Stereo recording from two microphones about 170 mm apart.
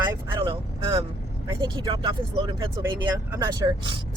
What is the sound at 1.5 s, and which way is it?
Speech, 25° right (ahead or behind).